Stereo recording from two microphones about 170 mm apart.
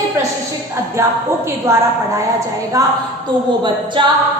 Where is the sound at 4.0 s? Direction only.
30° right (ahead or behind).